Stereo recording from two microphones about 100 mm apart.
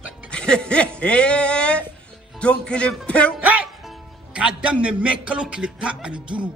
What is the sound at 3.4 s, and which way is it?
Music, 15° right (ahead or behind).